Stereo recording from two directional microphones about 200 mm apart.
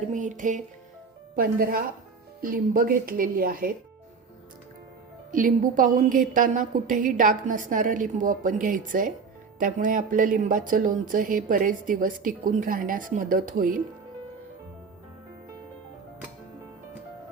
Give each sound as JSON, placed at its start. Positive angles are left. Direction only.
{"t": 0.1, "sound": "a woman's voice", "side_deg": -40}
{"t": 5.3, "sound": "a woman's voice", "side_deg": -40}